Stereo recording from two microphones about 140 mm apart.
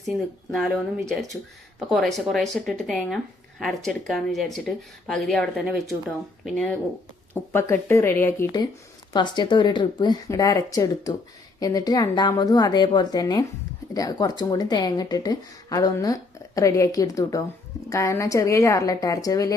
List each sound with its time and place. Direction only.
0.5 s speech: centre (ahead or behind)
7.5 s speech: 20° left (ahead or behind)
9.1 s a woman's voice: 30° left (ahead or behind)